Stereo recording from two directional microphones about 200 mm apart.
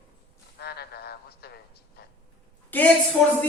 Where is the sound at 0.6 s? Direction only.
55° left (ahead or behind).